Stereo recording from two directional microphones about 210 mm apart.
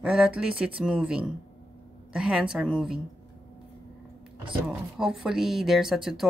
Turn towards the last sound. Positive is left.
turn(degrees=0)  # may be behind; listen again after turning